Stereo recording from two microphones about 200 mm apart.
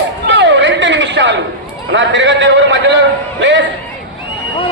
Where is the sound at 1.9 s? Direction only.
65° right (ahead or behind).